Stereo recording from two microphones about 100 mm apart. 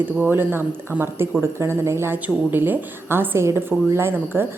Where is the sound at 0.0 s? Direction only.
20° right (ahead or behind).